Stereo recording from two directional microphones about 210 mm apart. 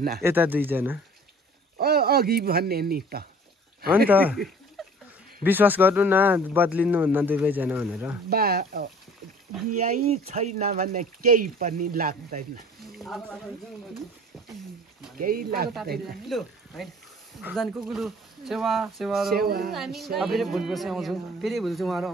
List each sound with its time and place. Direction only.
0.2 s speech: 10° right (ahead or behind)
1.8 s speech: 45° right (ahead or behind)
4.1 s speech: 10° right (ahead or behind)
4.8 s a sound: centre (ahead or behind)
5.4 s speech: 10° right (ahead or behind)
8.3 s speech: 45° right (ahead or behind)
12.8 s speech: centre (ahead or behind)
15.1 s speech: 45° right (ahead or behind)
16.3 s a woman's voice: centre (ahead or behind)
19.3 s speech: 45° right (ahead or behind)
19.7 s a woman's voice: centre (ahead or behind)